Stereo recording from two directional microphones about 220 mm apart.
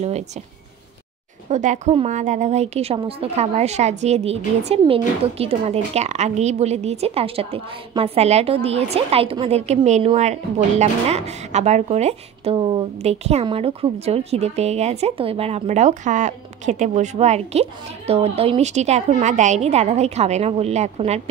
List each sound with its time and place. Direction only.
1.5 s a woman's voice: 35° right (ahead or behind)